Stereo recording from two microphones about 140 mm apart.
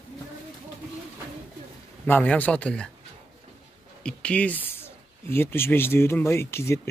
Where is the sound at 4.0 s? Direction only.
5° left (ahead or behind).